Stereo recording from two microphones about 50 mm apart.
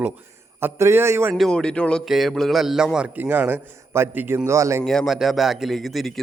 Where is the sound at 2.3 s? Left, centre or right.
Centre.